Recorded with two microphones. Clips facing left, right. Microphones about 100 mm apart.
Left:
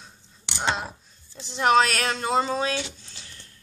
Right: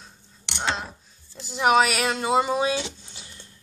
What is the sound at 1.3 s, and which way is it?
Speech, 5° right (ahead or behind).